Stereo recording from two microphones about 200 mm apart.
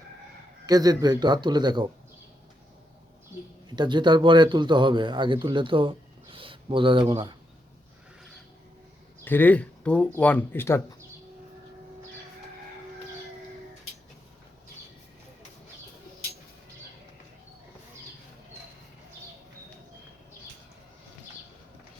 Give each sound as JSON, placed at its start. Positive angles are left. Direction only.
{"t": 0.6, "sound": "speech", "side_deg": -20}
{"t": 3.8, "sound": "speech", "side_deg": -20}
{"t": 9.2, "sound": "speech", "side_deg": 10}